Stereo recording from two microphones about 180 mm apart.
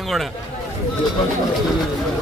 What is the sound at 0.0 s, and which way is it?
Speech, centre (ahead or behind).